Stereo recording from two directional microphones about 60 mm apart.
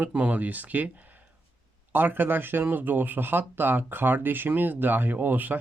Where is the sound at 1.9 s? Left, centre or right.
Right.